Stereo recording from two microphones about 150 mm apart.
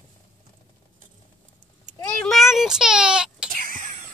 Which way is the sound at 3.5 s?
65° right (ahead or behind).